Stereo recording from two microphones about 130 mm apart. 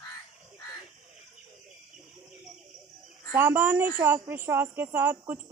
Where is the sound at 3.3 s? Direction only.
15° right (ahead or behind).